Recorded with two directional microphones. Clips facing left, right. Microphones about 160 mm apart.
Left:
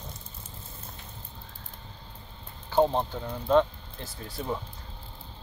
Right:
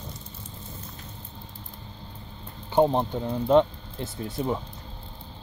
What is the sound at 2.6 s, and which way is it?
Speech, 20° right (ahead or behind).